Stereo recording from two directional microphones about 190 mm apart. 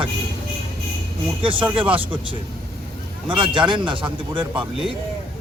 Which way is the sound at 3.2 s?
25° right (ahead or behind).